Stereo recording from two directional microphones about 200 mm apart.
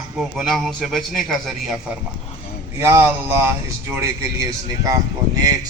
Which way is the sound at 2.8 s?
10° right (ahead or behind).